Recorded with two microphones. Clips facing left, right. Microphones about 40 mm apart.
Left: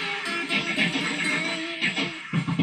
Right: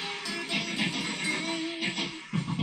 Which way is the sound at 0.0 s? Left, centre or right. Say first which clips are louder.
Left 6 dB; left.